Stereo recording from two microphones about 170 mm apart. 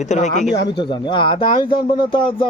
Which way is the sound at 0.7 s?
30° left (ahead or behind).